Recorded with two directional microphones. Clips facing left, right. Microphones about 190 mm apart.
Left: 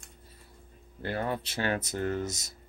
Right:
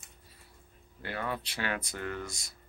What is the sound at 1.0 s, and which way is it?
Speech, 35° left (ahead or behind).